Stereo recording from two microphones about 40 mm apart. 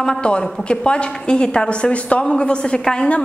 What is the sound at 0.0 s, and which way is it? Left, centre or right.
A woman's voice, left.